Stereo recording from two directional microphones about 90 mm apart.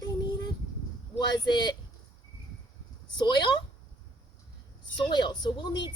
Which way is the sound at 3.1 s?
55° left (ahead or behind).